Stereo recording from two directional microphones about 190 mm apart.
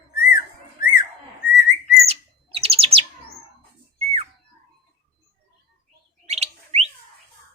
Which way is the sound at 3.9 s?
30° right (ahead or behind).